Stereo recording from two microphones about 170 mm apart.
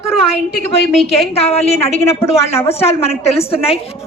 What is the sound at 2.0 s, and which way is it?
Speech, 15° left (ahead or behind).